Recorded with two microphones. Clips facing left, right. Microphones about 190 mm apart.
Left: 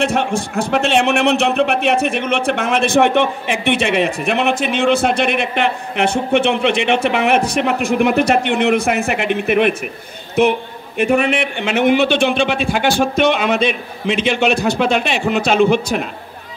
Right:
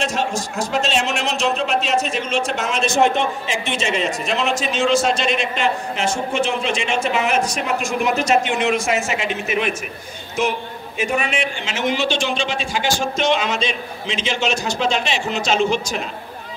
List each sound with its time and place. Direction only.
0.0 s a man's voice: 60° left (ahead or behind)